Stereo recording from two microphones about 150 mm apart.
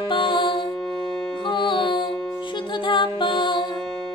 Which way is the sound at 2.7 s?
35° left (ahead or behind).